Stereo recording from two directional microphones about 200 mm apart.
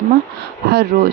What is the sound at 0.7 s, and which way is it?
Speech, 55° right (ahead or behind).